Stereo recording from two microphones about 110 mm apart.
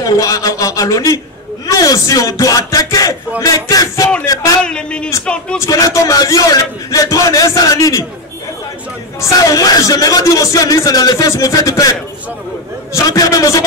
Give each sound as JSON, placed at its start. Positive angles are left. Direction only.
{"t": 0.0, "sound": "speech", "side_deg": 30}
{"t": 4.6, "sound": "speech", "side_deg": 10}
{"t": 5.7, "sound": "speech", "side_deg": 30}
{"t": 9.2, "sound": "speech", "side_deg": 35}